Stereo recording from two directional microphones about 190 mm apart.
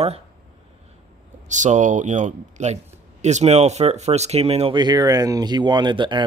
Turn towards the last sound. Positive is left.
turn(degrees=-25)  # may be behind; listen again after turning